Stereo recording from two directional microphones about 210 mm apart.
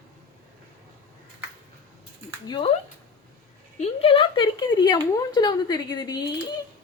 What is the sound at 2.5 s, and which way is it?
Speech, 20° left (ahead or behind).